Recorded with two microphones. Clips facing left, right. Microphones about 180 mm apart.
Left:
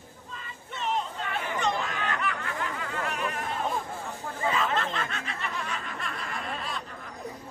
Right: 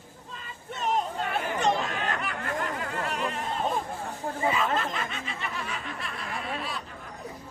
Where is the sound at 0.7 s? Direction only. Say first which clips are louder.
Right 3 dB; 40° right (ahead or behind).